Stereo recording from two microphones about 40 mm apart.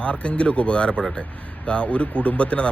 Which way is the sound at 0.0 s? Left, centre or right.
Left.